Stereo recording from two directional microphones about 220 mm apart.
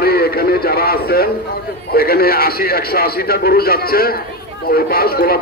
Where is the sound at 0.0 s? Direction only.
45° left (ahead or behind).